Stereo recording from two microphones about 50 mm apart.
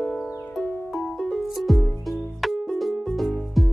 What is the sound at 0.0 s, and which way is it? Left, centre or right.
Music, centre.